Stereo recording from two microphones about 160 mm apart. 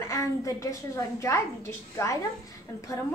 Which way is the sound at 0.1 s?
20° left (ahead or behind).